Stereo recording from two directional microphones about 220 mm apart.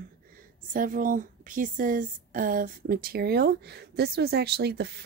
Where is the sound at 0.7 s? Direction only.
40° right (ahead or behind).